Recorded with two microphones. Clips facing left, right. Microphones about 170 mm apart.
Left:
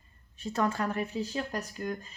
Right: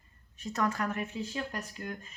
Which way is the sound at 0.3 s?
30° left (ahead or behind).